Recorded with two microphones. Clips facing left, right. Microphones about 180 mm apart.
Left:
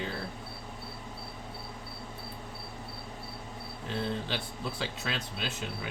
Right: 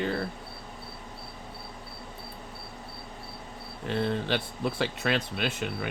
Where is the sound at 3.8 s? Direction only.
65° right (ahead or behind).